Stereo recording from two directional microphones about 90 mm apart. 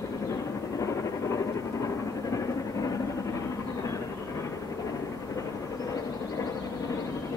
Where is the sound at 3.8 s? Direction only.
35° left (ahead or behind).